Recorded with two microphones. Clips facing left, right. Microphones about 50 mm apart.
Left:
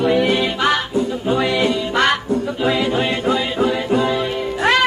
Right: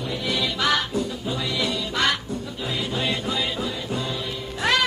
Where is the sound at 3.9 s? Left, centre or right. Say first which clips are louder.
Left 11 dB; left.